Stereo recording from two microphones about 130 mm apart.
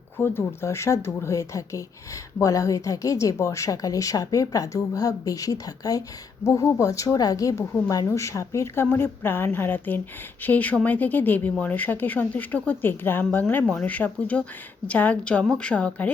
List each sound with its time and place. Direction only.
0.2 s a woman's voice: 20° left (ahead or behind)